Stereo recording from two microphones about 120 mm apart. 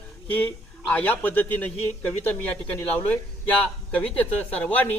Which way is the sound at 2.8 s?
15° left (ahead or behind).